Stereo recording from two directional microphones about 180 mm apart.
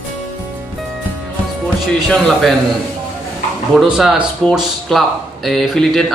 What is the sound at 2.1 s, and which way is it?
Speech, centre (ahead or behind).